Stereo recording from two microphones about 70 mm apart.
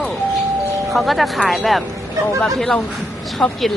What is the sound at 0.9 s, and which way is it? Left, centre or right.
Speech, centre.